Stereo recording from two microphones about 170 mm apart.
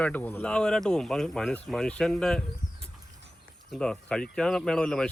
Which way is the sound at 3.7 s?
5° left (ahead or behind).